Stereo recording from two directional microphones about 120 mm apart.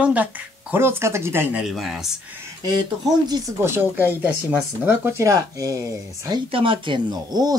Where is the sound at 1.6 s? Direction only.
5° right (ahead or behind).